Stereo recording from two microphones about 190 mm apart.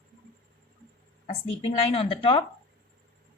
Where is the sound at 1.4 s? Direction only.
30° left (ahead or behind).